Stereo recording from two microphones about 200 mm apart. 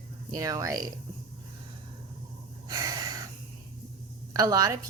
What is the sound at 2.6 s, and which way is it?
Gasp, 20° right (ahead or behind).